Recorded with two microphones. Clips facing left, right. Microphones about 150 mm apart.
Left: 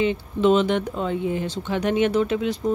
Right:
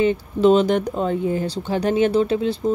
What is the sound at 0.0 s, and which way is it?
Speech, 40° right (ahead or behind).